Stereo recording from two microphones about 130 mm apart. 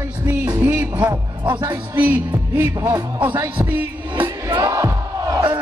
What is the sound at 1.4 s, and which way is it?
Speech, 35° right (ahead or behind).